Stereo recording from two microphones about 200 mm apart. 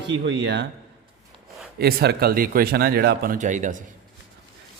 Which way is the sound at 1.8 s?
50° right (ahead or behind).